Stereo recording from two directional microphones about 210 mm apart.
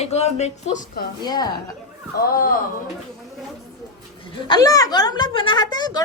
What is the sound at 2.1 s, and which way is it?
Speech, 45° left (ahead or behind).